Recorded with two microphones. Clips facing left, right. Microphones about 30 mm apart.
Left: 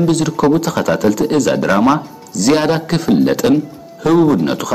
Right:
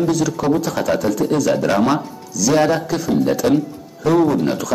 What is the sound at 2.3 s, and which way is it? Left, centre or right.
Speech, left.